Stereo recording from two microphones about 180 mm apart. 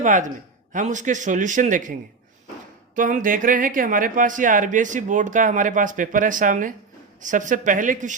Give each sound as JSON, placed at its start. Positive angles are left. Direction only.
{"t": 0.0, "sound": "speech", "side_deg": -45}